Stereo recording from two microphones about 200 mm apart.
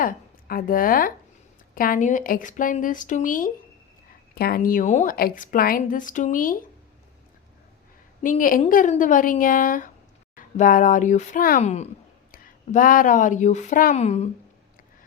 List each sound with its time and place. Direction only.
0.0 s a woman's voice: 45° left (ahead or behind)
8.2 s a woman's voice: 40° left (ahead or behind)